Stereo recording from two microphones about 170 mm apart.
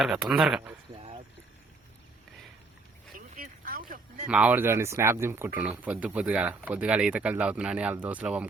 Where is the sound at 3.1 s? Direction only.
55° right (ahead or behind).